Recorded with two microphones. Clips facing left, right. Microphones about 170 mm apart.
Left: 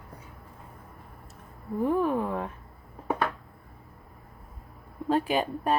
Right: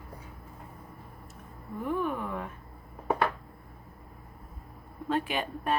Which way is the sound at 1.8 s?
35° left (ahead or behind).